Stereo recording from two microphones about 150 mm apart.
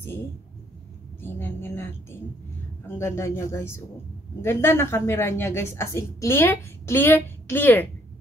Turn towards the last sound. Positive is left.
turn(degrees=15)  # may be behind; listen again after turning